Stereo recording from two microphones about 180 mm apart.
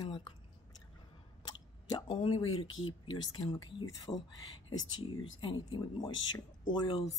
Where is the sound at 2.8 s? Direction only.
25° left (ahead or behind).